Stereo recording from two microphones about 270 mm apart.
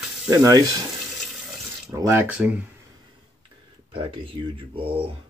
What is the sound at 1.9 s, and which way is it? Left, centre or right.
Speech, centre.